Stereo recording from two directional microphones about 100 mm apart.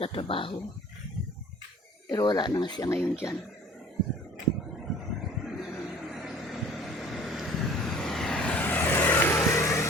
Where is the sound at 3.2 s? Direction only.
25° left (ahead or behind).